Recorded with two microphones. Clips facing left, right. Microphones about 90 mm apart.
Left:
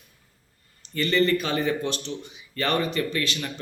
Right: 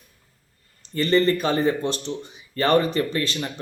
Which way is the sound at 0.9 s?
35° right (ahead or behind).